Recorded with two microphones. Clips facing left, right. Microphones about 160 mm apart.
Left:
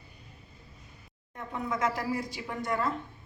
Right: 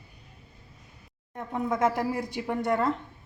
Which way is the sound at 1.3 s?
55° right (ahead or behind).